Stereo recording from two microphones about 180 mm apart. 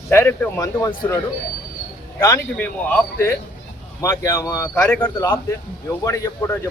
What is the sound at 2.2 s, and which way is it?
Speech, 15° left (ahead or behind).